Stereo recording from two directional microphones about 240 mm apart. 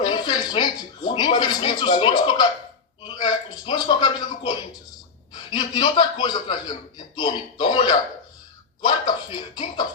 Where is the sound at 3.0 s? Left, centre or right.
Centre.